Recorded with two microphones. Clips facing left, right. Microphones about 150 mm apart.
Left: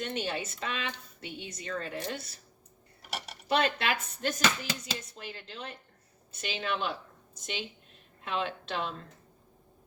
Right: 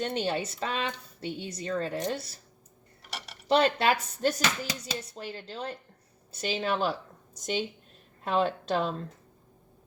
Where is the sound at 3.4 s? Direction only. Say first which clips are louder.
Right 5 dB; 35° right (ahead or behind).